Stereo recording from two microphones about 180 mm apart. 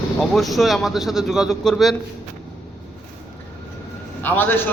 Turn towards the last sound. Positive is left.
turn(degrees=10)  # may be behind; listen again after turning